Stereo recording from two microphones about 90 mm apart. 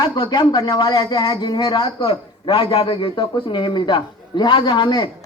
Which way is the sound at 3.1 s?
60° left (ahead or behind).